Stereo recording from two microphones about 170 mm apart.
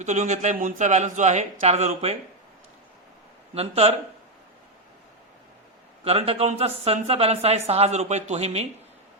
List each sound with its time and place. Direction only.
0.0 s a man's voice: 45° right (ahead or behind)
3.5 s speech: 35° right (ahead or behind)
6.1 s speech: 35° right (ahead or behind)